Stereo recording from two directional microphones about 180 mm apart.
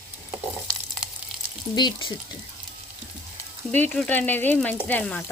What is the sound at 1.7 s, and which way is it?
Speech, 25° left (ahead or behind).